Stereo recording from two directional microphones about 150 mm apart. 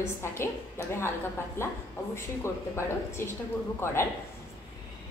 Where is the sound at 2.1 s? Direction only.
15° left (ahead or behind).